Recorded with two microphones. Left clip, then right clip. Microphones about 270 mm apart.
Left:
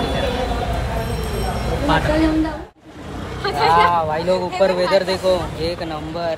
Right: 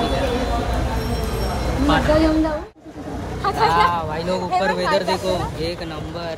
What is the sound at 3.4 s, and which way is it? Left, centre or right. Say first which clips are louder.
Speech: left 2 dB; centre.